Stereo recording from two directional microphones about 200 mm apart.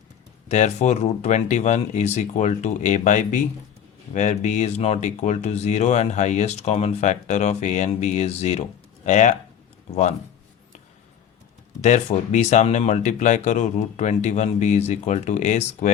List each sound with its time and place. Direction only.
0.4 s speech: 35° left (ahead or behind)
11.8 s speech: 35° left (ahead or behind)